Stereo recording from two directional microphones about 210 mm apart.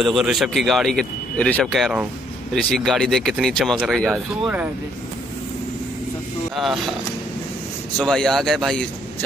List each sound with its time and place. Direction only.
0.0 s speech: centre (ahead or behind)
6.5 s speech: centre (ahead or behind)
8.0 s speech: centre (ahead or behind)